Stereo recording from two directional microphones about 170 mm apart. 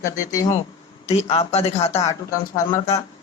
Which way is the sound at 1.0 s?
40° left (ahead or behind).